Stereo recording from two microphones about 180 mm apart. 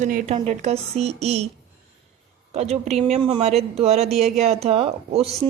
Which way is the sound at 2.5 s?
35° right (ahead or behind).